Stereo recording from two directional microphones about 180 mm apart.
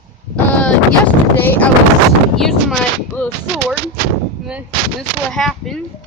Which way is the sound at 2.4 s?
Centre (ahead or behind).